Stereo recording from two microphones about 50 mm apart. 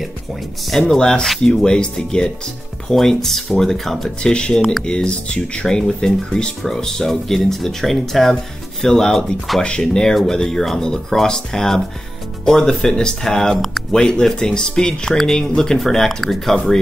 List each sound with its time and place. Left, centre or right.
0.7 s speech: centre
4.2 s speech: centre